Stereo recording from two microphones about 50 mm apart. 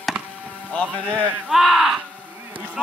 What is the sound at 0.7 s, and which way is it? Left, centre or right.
Speech, left.